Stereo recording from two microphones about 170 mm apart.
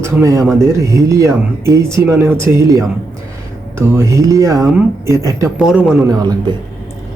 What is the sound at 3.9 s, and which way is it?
Speech, 15° right (ahead or behind).